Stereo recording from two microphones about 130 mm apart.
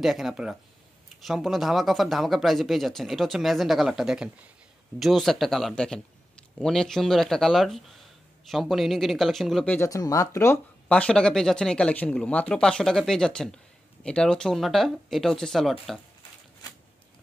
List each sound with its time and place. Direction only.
0.0 s speech: centre (ahead or behind)
9.8 s speech: 25° left (ahead or behind)
10.9 s speech: 10° left (ahead or behind)